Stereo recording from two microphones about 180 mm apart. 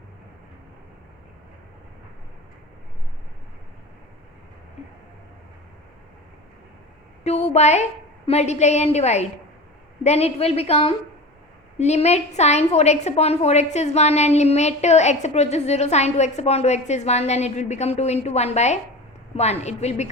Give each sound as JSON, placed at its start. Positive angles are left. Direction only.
{"t": 7.3, "sound": "a woman's voice", "side_deg": 35}